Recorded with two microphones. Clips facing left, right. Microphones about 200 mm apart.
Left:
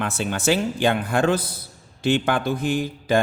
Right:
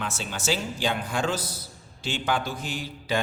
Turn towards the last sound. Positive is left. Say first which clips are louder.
# left 10 dB
turn(degrees=55)  # may be behind; listen again after turning